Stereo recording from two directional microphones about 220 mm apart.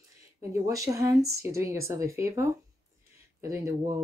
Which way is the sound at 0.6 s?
15° right (ahead or behind).